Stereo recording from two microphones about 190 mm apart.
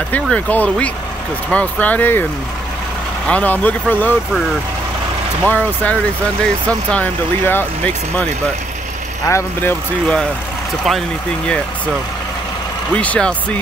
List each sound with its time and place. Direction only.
0.1 s speech: 10° left (ahead or behind)
3.3 s speech: 5° left (ahead or behind)
5.4 s speech: 10° left (ahead or behind)
9.3 s speech: 10° left (ahead or behind)
12.9 s speech: 5° left (ahead or behind)